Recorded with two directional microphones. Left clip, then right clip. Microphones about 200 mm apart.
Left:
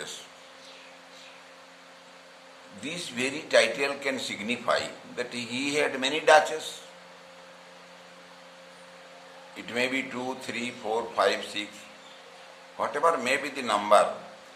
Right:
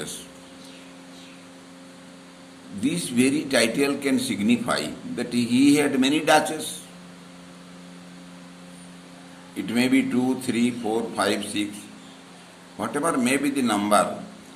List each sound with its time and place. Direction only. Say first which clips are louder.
2.8 s a man's voice: right 8 dB; 15° left (ahead or behind)
9.6 s a man's voice: right 6 dB; 15° left (ahead or behind)
12.7 s a man's voice: even; 15° left (ahead or behind)